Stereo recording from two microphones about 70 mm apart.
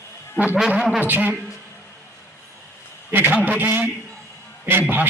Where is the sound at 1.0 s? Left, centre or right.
Right.